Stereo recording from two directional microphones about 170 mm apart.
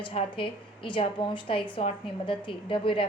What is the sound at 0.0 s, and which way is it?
A woman's voice, 30° left (ahead or behind).